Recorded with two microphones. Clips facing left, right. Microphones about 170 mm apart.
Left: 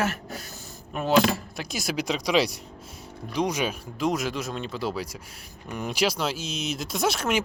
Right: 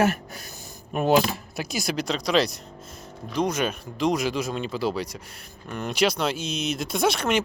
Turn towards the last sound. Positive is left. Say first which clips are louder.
# right 2 dB
turn(degrees=5)  # may be behind; listen again after turning